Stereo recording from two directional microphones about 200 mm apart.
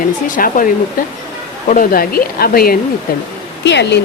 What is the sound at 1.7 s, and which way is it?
Speech, 45° left (ahead or behind).